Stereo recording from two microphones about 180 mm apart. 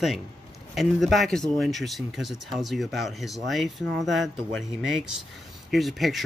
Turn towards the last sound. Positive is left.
turn(degrees=0)  # may be behind; listen again after turning